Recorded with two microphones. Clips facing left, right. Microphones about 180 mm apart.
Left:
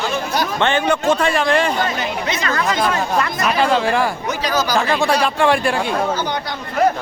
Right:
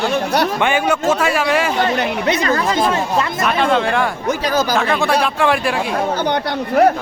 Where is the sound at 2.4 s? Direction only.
30° right (ahead or behind).